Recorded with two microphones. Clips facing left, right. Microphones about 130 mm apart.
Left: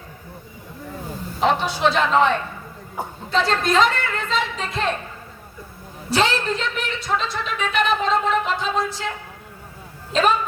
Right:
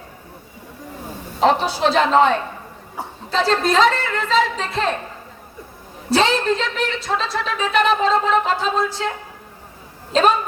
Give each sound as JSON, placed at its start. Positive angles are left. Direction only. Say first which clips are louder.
{"t": 1.4, "sound": "a woman's voice", "louder": "right 3 dB", "side_deg": -35}
{"t": 3.3, "sound": "a woman's voice", "louder": "right 2 dB", "side_deg": -30}
{"t": 6.1, "sound": "a woman's voice", "louder": "right 3 dB", "side_deg": -30}